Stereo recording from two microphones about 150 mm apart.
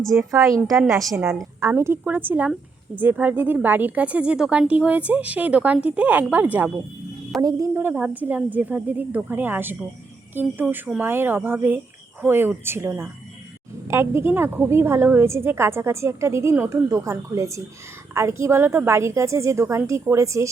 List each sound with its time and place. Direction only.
0.2 s a woman's voice: 20° right (ahead or behind)
0.7 s a woman's voice: centre (ahead or behind)
1.1 s a woman's voice: 10° right (ahead or behind)
7.4 s a woman's voice: 20° right (ahead or behind)